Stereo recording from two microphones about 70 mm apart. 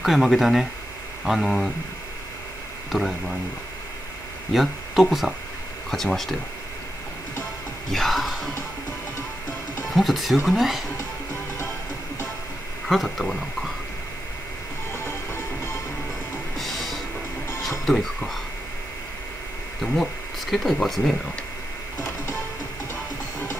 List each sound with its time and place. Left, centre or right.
0.0 s speech: centre
2.9 s speech: centre
4.5 s speech: centre
7.9 s speech: centre
9.9 s speech: centre
12.8 s speech: centre
14.9 s music: left
16.5 s music: centre
17.6 s speech: centre
19.8 s speech: centre